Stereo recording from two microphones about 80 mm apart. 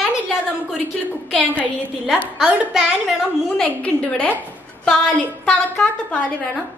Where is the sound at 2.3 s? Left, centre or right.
Centre.